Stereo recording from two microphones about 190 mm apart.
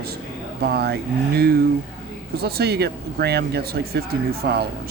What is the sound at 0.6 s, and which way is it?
Speech, 60° right (ahead or behind).